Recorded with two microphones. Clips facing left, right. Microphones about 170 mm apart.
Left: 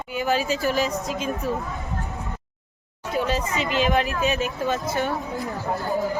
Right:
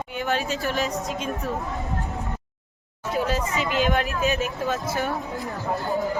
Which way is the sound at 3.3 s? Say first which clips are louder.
Even; centre (ahead or behind).